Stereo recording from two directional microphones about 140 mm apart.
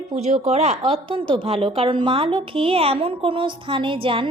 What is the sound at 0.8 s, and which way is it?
A woman's voice, 40° right (ahead or behind).